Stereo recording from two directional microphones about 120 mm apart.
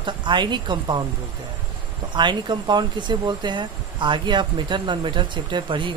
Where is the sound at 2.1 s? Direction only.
40° right (ahead or behind).